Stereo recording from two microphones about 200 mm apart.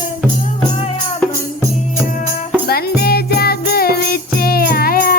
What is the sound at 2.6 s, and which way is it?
Music, 50° left (ahead or behind).